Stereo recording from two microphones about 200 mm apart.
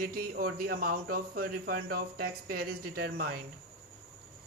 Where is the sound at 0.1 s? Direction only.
50° right (ahead or behind).